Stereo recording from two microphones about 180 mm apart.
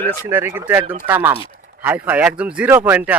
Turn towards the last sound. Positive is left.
turn(degrees=-10)  # may be behind; listen again after turning